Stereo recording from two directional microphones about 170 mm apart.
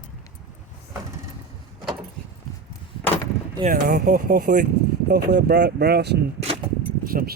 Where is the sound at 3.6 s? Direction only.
60° right (ahead or behind); by 6.2 s 75° right (ahead or behind).